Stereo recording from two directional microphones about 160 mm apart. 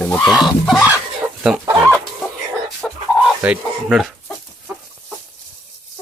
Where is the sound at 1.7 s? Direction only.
15° right (ahead or behind).